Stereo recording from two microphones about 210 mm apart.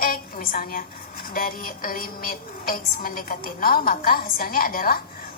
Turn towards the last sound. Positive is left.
turn(degrees=40)  # may be behind; listen again after turning